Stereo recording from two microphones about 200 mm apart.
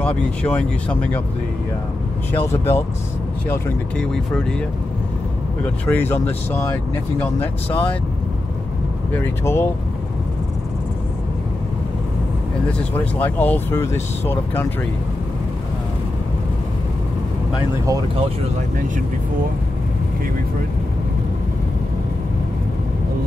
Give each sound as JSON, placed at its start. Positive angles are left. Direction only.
{"t": 0.0, "sound": "speech", "side_deg": 5}
{"t": 2.3, "sound": "speech", "side_deg": 10}
{"t": 5.9, "sound": "speech", "side_deg": 10}
{"t": 9.1, "sound": "speech", "side_deg": 10}
{"t": 12.6, "sound": "speech", "side_deg": 5}
{"t": 18.1, "sound": "speech", "side_deg": -30}